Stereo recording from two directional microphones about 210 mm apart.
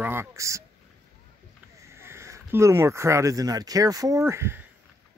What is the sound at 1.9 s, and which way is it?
Speech, 10° right (ahead or behind).